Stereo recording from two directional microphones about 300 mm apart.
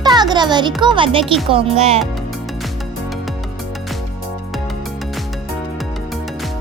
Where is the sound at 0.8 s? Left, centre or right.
Centre.